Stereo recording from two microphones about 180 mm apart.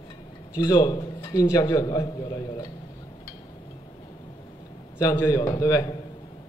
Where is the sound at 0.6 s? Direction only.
25° left (ahead or behind).